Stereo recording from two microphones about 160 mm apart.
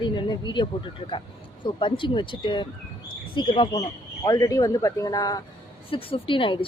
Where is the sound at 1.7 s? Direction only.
30° left (ahead or behind).